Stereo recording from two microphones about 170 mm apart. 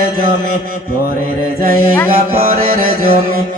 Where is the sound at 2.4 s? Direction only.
60° right (ahead or behind).